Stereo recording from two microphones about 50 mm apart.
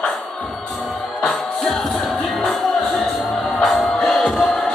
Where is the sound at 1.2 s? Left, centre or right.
Centre.